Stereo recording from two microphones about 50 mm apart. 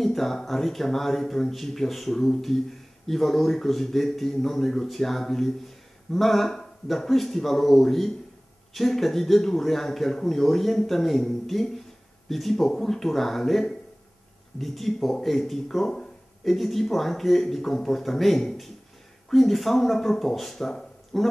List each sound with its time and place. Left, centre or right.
0.0 s speech: centre